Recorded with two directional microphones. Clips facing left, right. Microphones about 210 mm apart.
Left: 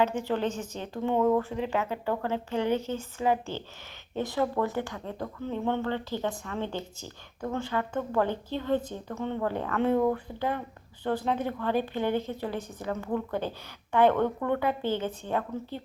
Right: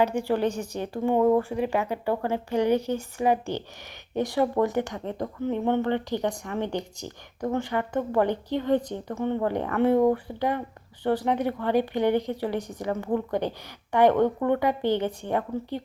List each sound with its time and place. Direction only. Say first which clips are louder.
0.0 s speech: right 3 dB; 10° right (ahead or behind)